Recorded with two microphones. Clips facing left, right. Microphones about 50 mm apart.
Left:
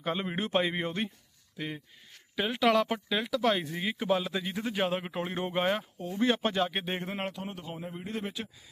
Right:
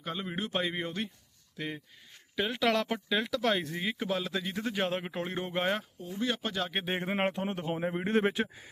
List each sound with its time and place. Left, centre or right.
0.0 s speech: left
0.5 s speech: centre
1.5 s speech: centre
6.0 s speech: left
6.7 s speech: centre
7.1 s speech: right